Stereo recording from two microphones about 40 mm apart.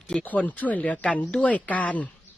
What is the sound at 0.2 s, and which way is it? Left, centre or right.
Speech, left.